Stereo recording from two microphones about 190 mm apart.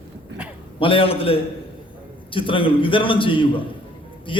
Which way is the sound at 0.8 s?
30° left (ahead or behind).